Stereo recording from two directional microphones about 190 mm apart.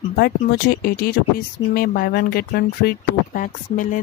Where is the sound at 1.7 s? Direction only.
55° left (ahead or behind).